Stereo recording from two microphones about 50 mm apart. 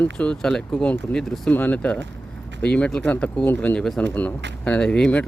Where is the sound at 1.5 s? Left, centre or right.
Left.